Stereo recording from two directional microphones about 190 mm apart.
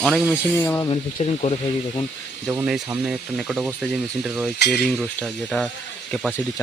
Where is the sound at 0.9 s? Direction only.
30° left (ahead or behind).